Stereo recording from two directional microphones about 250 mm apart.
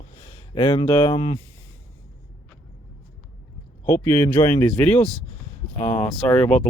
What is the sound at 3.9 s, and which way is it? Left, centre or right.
Speech, centre.